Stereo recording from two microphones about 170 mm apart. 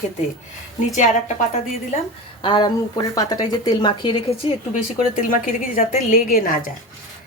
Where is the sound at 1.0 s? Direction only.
40° left (ahead or behind).